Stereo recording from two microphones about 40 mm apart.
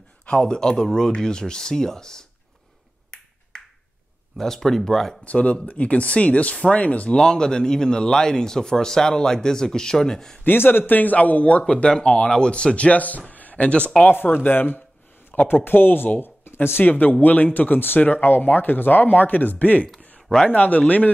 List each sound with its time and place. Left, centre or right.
0.3 s speech: centre
4.4 s speech: centre
5.2 s speech: left
7.2 s speech: centre
10.4 s speech: left
11.4 s speech: left
13.3 s a sound: left
14.1 s speech: left
16.2 s a sound: left
16.8 s speech: left